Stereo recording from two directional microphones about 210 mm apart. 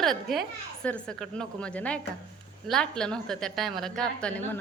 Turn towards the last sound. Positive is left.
turn(degrees=5)  # may be behind; listen again after turning